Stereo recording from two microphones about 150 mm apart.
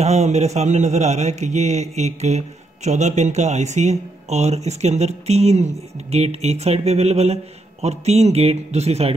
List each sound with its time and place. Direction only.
0.0 s a man's voice: 45° right (ahead or behind)